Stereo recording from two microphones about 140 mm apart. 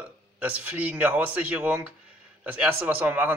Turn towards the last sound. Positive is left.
turn(degrees=-15)  # may be behind; listen again after turning